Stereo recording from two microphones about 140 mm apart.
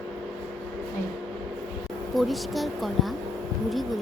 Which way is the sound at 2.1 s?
Centre (ahead or behind).